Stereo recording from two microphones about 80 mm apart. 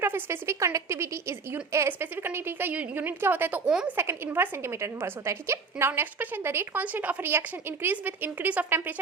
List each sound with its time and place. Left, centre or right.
0.0 s a woman's voice: right
1.9 s a woman's voice: right
3.7 s a woman's voice: centre
3.9 s a woman's voice: right
6.8 s a woman's voice: centre